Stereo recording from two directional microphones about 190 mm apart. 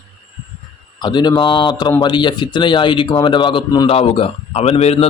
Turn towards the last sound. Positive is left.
turn(degrees=35)  # may be behind; listen again after turning